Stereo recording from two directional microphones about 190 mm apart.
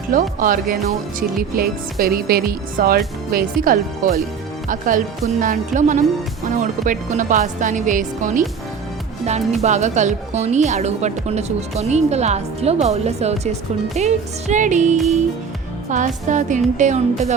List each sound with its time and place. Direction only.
0.1 s speech: 45° right (ahead or behind)
9.6 s speech: 35° right (ahead or behind)